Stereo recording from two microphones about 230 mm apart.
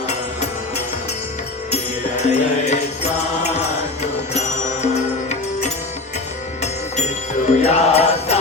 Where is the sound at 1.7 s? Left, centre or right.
Left.